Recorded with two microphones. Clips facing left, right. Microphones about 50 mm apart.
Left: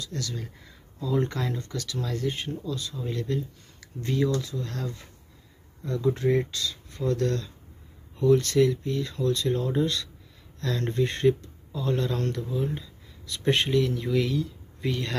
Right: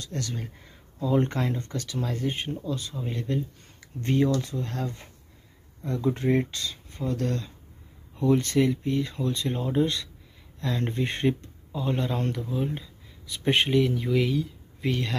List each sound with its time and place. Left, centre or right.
0.0 s speech: right
4.0 s speech: right; by 15.0 s centre